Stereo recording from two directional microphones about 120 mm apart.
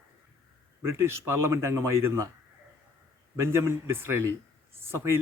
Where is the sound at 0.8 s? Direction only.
20° right (ahead or behind).